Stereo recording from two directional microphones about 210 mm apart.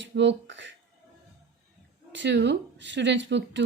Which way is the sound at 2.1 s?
55° right (ahead or behind).